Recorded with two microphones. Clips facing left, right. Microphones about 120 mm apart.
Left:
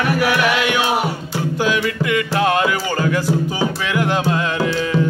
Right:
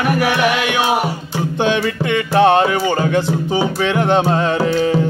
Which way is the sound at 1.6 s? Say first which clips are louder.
Right 3 dB; 30° right (ahead or behind).